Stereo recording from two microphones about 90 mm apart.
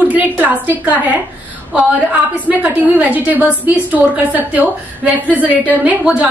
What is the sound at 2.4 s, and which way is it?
A woman's voice, 15° right (ahead or behind).